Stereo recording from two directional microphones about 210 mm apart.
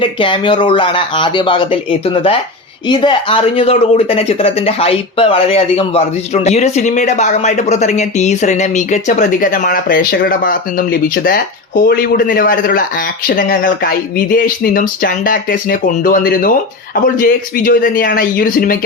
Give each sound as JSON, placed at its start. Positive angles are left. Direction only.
{"t": 0.0, "sound": "speech", "side_deg": 25}